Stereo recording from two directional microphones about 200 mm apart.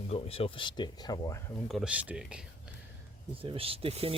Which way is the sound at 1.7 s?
5° right (ahead or behind).